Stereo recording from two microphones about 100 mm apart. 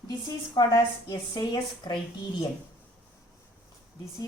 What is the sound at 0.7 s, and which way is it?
A woman's voice, 45° left (ahead or behind).